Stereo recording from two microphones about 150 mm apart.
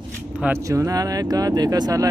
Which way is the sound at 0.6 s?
20° right (ahead or behind).